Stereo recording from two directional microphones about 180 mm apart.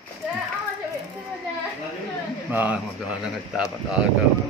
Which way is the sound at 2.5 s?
10° right (ahead or behind).